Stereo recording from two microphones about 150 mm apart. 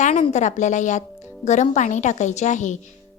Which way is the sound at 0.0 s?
50° left (ahead or behind).